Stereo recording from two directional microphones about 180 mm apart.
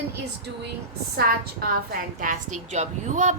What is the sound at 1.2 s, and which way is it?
A woman's voice, 55° right (ahead or behind).